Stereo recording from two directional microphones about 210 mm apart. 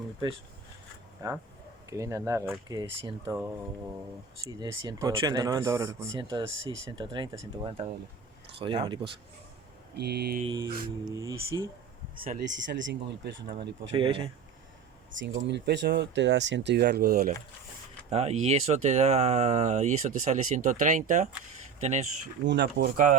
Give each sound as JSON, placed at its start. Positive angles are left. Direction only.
{"t": 1.2, "sound": "speech", "side_deg": -15}
{"t": 4.4, "sound": "speech", "side_deg": -20}
{"t": 10.0, "sound": "mantra", "side_deg": -50}
{"t": 10.4, "sound": "speech", "side_deg": -20}
{"t": 12.2, "sound": "speech", "side_deg": -40}
{"t": 12.5, "sound": "speech", "side_deg": -60}
{"t": 13.6, "sound": "speech", "side_deg": -25}
{"t": 15.1, "sound": "speech", "side_deg": -60}
{"t": 18.1, "sound": "speech", "side_deg": -30}
{"t": 22.4, "sound": "speech", "side_deg": -55}